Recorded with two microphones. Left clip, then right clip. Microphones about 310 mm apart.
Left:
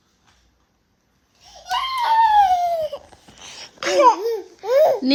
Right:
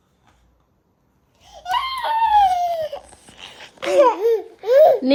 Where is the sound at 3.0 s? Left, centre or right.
Left.